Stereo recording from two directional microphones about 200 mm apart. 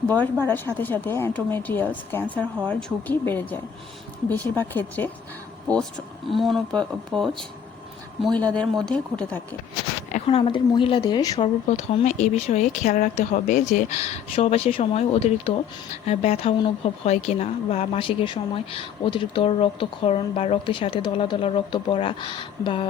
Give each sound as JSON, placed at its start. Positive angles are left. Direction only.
{"t": 0.1, "sound": "speech", "side_deg": 10}
{"t": 10.1, "sound": "speech", "side_deg": 35}